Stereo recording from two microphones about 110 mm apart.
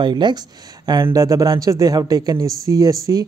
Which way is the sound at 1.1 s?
30° right (ahead or behind).